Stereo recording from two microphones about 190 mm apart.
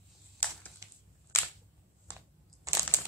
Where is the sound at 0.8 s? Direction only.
15° right (ahead or behind).